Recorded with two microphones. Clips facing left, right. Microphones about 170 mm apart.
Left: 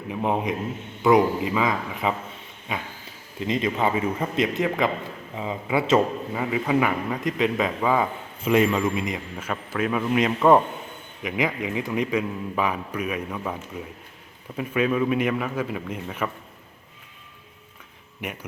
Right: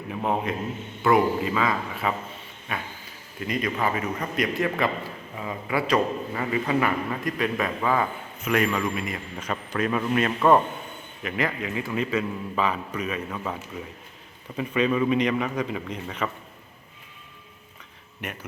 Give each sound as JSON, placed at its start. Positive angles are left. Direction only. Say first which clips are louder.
{"t": 0.1, "sound": "a man's voice", "louder": "left 2 dB", "side_deg": 15}
{"t": 6.3, "sound": "a man's voice", "louder": "left 3 dB", "side_deg": 10}
{"t": 8.4, "sound": "a man's voice", "louder": "left 4 dB", "side_deg": 25}
{"t": 9.4, "sound": "a man's voice", "louder": "even", "side_deg": 5}
{"t": 18.2, "sound": "a man's voice", "louder": "left 2 dB", "side_deg": 10}